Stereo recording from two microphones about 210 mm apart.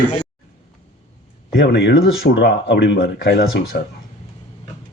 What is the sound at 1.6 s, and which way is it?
Speech, 60° left (ahead or behind).